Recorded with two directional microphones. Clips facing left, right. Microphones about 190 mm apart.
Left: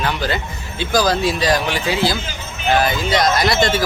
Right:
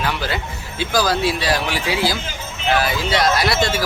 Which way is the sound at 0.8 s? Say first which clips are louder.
Left 2 dB; 5° right (ahead or behind).